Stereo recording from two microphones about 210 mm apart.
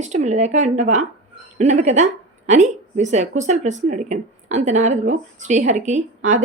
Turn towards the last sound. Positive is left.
turn(degrees=-35)  # may be behind; listen again after turning